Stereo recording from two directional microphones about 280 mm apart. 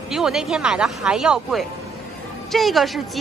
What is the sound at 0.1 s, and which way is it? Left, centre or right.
A woman's voice, centre.